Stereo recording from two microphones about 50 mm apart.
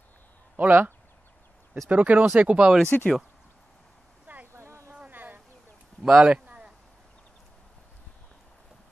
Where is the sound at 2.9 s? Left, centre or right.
Left.